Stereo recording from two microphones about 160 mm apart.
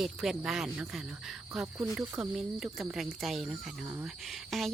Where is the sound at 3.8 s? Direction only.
10° right (ahead or behind).